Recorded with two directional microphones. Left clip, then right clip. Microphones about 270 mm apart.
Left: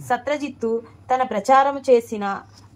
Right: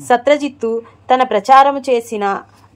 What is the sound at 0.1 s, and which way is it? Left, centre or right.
Speech, right.